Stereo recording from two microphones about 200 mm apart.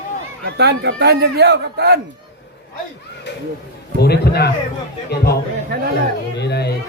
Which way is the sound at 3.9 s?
55° left (ahead or behind).